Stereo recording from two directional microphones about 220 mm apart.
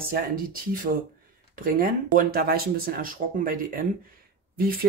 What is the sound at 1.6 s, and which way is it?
Speech, 40° right (ahead or behind).